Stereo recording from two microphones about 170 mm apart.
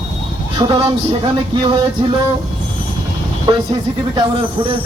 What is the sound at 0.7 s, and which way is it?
Speech, 30° right (ahead or behind).